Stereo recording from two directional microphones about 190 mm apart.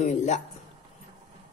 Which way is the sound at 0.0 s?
40° left (ahead or behind).